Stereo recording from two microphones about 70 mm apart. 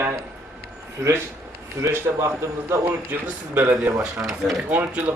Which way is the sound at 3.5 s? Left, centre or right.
Centre.